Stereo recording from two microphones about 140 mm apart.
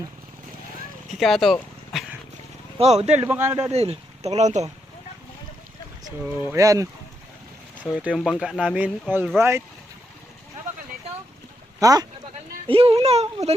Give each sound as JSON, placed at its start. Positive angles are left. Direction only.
{"t": 1.2, "sound": "a sound", "side_deg": 0}
{"t": 2.7, "sound": "speech", "side_deg": -45}
{"t": 3.2, "sound": "speech", "side_deg": -15}
{"t": 3.7, "sound": "speech", "side_deg": -50}
{"t": 6.5, "sound": "speech", "side_deg": -25}
{"t": 8.1, "sound": "speech", "side_deg": 0}
{"t": 11.8, "sound": "speech", "side_deg": -25}
{"t": 12.6, "sound": "speech", "side_deg": -45}